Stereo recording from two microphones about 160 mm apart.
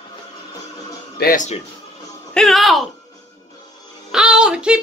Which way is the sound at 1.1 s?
60° left (ahead or behind).